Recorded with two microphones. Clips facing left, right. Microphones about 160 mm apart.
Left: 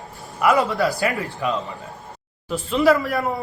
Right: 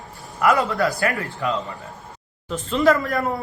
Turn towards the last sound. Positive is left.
turn(degrees=10)  # may be behind; listen again after turning